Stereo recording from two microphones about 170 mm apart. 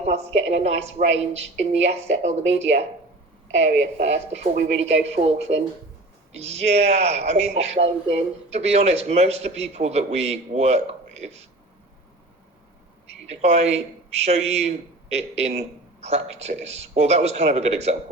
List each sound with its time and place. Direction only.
0.0 s a man's voice: 40° right (ahead or behind)
13.2 s a man's voice: 40° right (ahead or behind)